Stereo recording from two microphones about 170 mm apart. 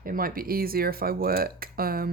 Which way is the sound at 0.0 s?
55° right (ahead or behind).